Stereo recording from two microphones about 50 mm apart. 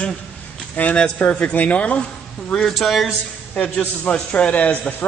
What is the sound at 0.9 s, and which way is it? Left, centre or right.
Mantra, left.